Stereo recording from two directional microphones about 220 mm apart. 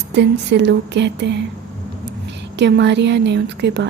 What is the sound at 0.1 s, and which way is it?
Speech, 50° right (ahead or behind).